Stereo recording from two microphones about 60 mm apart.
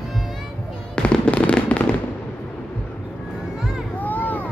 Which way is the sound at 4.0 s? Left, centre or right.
Left.